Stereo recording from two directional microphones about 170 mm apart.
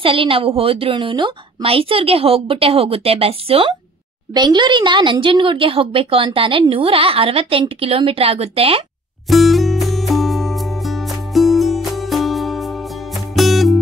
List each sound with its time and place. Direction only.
0.0 s speech: 30° right (ahead or behind)
9.3 s music: centre (ahead or behind)